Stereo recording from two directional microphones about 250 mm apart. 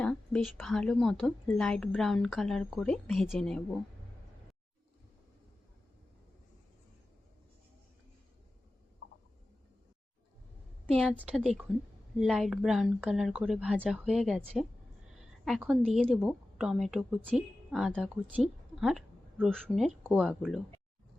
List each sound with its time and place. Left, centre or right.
0.0 s a woman's voice: centre
9.0 s a sound: left
10.9 s a woman's voice: centre